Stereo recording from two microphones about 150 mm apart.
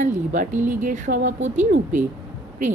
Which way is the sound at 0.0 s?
55° right (ahead or behind).